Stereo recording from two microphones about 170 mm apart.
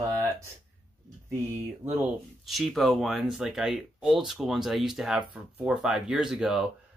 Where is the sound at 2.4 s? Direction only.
Centre (ahead or behind).